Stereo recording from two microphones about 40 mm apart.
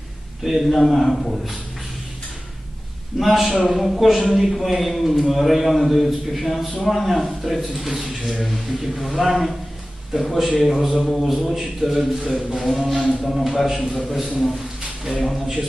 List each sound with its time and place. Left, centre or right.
0.4 s a man's voice: centre
3.2 s a man's voice: centre
11.5 s a man's voice: centre
12.3 s a man's voice: centre
12.5 s a man's voice: centre
13.7 s a man's voice: centre